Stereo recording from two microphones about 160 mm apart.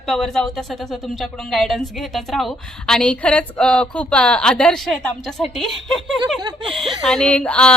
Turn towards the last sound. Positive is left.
turn(degrees=10)  # may be behind; listen again after turning